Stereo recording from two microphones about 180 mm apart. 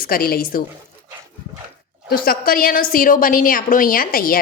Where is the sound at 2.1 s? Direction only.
55° left (ahead or behind).